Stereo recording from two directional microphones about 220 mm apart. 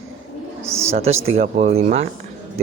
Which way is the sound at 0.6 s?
10° right (ahead or behind).